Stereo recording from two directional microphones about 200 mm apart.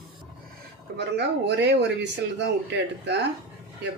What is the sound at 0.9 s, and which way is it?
Speech, 55° right (ahead or behind).